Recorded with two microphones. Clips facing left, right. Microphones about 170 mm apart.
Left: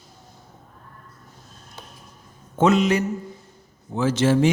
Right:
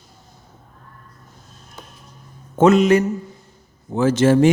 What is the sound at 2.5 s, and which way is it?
Mantra, 50° right (ahead or behind).